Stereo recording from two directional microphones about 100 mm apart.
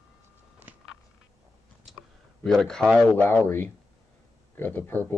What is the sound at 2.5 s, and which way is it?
Speech, 5° left (ahead or behind).